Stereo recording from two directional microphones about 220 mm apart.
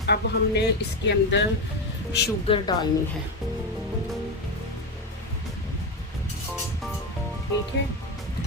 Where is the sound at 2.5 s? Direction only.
25° left (ahead or behind).